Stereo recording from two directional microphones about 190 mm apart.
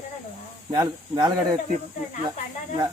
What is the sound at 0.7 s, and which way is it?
Speech, 20° right (ahead or behind).